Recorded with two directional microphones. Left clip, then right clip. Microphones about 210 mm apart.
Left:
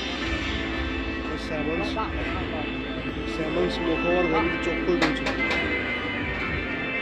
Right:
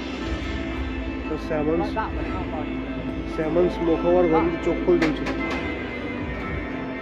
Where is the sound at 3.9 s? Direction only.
30° right (ahead or behind).